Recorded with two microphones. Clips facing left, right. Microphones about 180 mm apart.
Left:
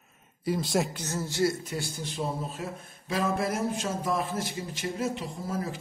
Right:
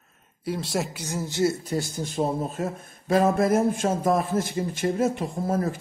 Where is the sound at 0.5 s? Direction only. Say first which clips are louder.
Even; centre (ahead or behind).